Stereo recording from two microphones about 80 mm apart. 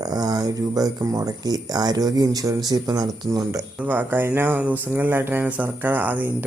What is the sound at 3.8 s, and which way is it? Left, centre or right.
Speech, right.